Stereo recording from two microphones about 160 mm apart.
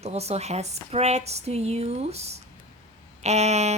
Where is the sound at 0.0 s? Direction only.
40° right (ahead or behind).